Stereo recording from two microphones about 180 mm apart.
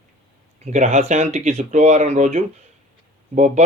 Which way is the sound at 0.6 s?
40° right (ahead or behind).